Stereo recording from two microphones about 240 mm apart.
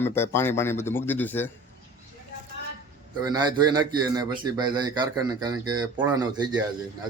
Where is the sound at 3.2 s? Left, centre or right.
Centre.